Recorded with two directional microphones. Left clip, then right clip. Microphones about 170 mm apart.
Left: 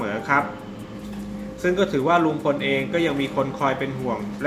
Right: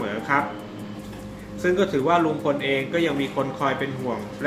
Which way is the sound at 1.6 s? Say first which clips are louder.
Even; 10° left (ahead or behind).